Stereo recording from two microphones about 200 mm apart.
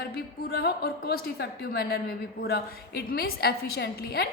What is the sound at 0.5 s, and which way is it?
A woman's voice, 55° left (ahead or behind).